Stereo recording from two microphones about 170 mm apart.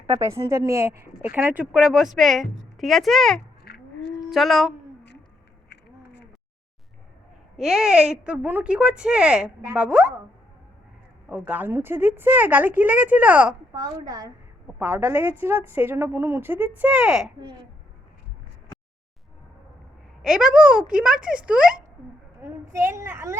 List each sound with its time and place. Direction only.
0.2 s speech: 20° right (ahead or behind); by 3.4 s 5° left (ahead or behind)
3.6 s a sound: 70° left (ahead or behind)
4.2 s speech: centre (ahead or behind)
5.6 s a sound: 75° left (ahead or behind)
7.5 s a woman's voice: centre (ahead or behind)
11.3 s a woman's voice: 10° right (ahead or behind)
13.7 s a woman's voice: 20° right (ahead or behind); by 17.3 s 5° right (ahead or behind)
20.2 s speech: 5° right (ahead or behind)
22.4 s a woman's voice: 15° right (ahead or behind)